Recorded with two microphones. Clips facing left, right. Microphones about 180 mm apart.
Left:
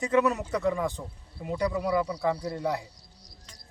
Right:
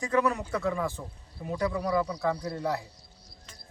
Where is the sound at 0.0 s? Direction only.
20° left (ahead or behind).